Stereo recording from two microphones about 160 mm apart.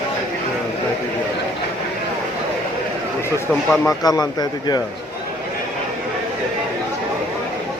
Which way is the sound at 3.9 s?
25° left (ahead or behind).